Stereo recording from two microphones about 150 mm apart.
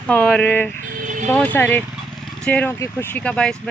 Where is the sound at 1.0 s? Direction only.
60° right (ahead or behind).